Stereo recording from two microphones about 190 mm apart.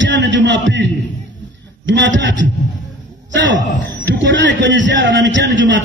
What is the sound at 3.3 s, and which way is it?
A man's voice, 70° right (ahead or behind).